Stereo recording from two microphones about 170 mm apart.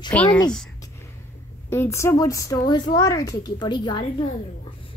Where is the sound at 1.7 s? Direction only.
15° left (ahead or behind).